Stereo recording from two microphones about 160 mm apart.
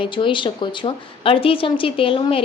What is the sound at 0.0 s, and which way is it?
A woman's voice, 30° left (ahead or behind).